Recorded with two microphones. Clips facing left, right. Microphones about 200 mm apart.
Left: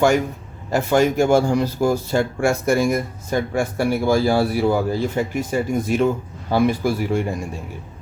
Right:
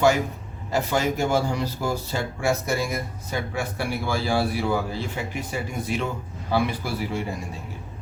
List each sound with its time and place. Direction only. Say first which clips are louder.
0.7 s speech: left 7 dB; 50° left (ahead or behind)